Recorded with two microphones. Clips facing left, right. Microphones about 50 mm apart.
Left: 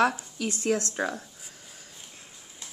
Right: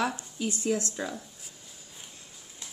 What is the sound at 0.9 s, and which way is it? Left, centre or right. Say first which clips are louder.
Speech: left 5 dB; left.